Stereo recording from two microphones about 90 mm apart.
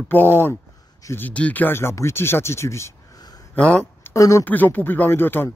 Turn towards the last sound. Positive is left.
turn(degrees=25)  # may be behind; listen again after turning